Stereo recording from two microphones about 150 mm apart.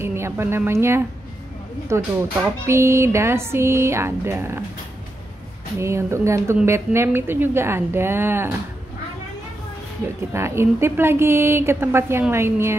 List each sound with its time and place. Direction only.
0.0 s a woman's voice: 15° right (ahead or behind)
5.8 s a woman's voice: 20° right (ahead or behind)
10.3 s a woman's voice: 15° right (ahead or behind)